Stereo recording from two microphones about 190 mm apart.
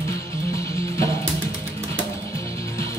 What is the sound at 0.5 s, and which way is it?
Music, 15° left (ahead or behind).